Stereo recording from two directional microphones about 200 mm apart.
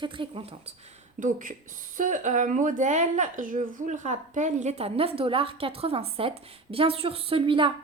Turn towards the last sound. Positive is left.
turn(degrees=-25)  # may be behind; listen again after turning